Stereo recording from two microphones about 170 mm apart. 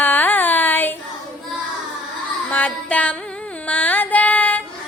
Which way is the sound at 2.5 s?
10° left (ahead or behind).